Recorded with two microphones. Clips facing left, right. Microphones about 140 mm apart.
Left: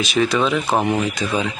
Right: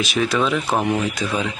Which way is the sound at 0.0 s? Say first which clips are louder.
Left 2 dB; 5° right (ahead or behind).